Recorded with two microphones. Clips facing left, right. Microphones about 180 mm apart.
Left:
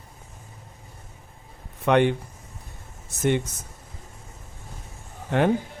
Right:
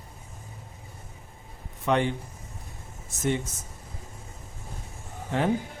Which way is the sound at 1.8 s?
65° left (ahead or behind).